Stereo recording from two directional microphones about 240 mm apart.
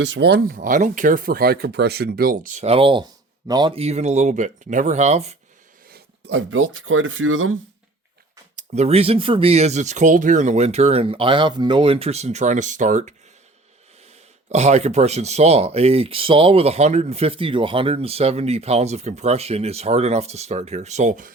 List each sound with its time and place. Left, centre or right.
0.0 s speech: right
5.9 s speech: right
8.5 s speech: right
14.5 s speech: right